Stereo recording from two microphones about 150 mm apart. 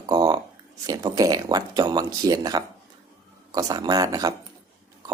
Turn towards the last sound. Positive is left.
turn(degrees=-25)  # may be behind; listen again after turning